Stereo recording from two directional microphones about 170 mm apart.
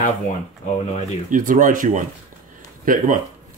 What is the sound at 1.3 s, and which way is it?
Speech, 50° right (ahead or behind).